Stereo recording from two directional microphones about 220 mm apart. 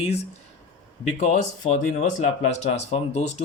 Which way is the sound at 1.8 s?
35° left (ahead or behind).